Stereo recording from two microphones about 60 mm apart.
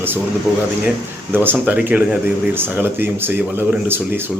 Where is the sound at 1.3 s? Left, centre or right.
Right.